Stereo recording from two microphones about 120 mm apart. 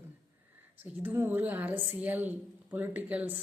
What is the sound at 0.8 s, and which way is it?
A woman's voice, 15° right (ahead or behind).